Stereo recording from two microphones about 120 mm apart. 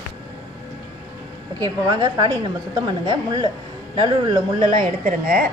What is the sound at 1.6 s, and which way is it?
A woman's voice, 30° right (ahead or behind).